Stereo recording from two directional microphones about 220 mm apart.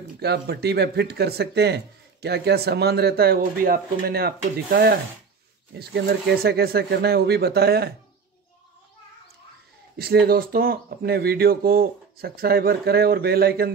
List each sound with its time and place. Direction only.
0.2 s speech: 45° right (ahead or behind)
9.9 s speech: 45° right (ahead or behind)